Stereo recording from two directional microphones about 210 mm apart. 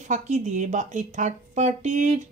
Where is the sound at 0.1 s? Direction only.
35° right (ahead or behind).